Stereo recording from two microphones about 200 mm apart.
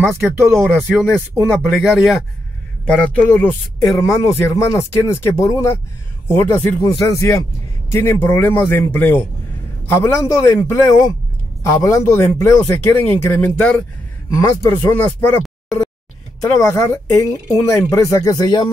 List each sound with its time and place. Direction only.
0.1 s a man's voice: 10° right (ahead or behind); by 18.7 s 20° left (ahead or behind)